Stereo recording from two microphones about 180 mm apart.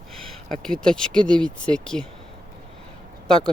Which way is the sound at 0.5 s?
5° left (ahead or behind).